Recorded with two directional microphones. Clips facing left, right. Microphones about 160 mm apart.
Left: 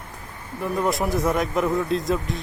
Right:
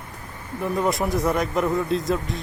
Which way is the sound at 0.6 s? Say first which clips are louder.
Even; centre (ahead or behind).